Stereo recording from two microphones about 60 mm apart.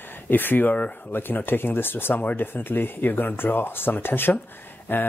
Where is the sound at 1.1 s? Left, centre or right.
Left.